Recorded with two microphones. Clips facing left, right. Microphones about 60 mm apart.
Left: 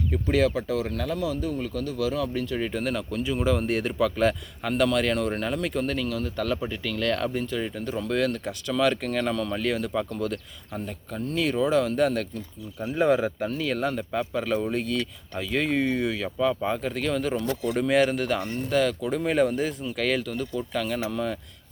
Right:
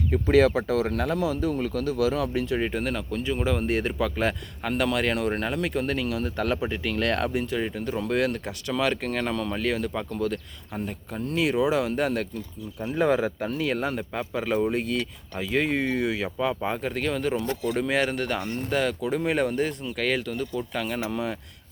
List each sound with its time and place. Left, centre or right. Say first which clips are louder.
0.1 s speech: right 4 dB; right
1.9 s speech: right 3 dB; right
2.7 s speech: even; centre
6.2 s speech: right 1 dB; right; by 13.3 s centre
13.5 s speech: even; centre